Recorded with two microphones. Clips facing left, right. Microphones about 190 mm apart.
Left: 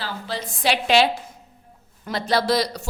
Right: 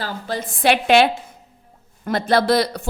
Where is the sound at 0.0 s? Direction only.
50° right (ahead or behind).